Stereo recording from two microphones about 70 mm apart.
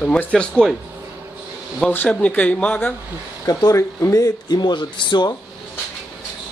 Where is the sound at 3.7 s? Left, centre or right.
Left.